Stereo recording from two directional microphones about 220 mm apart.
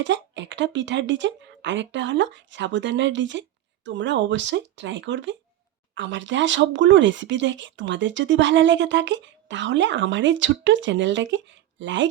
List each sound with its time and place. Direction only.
0.0 s speech: 55° right (ahead or behind)